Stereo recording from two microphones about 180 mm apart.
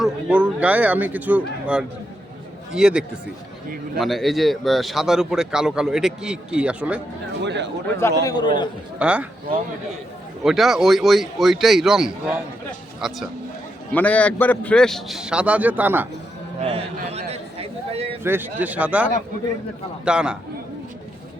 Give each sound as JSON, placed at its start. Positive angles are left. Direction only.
{"t": 0.0, "sound": "a man's voice", "side_deg": -5}
{"t": 7.4, "sound": "speech", "side_deg": -75}
{"t": 8.2, "sound": "a man's voice", "side_deg": 20}
{"t": 9.0, "sound": "a man's voice", "side_deg": -5}
{"t": 10.4, "sound": "a man's voice", "side_deg": 0}
{"t": 16.6, "sound": "a sound", "side_deg": -35}
{"t": 18.2, "sound": "speech", "side_deg": -10}
{"t": 20.1, "sound": "a man's voice", "side_deg": -5}